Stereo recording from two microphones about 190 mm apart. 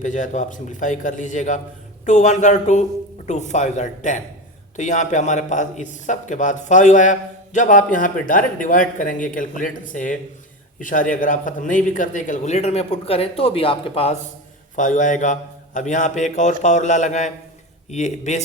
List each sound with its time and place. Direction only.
0.0 s a man's voice: 40° left (ahead or behind)
14.8 s a man's voice: 40° left (ahead or behind)